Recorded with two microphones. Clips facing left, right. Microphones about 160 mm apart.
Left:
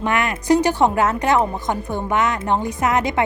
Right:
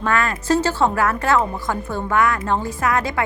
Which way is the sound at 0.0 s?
20° left (ahead or behind).